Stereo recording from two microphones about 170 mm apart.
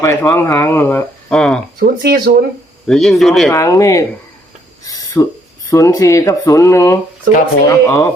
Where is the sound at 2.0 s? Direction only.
70° right (ahead or behind).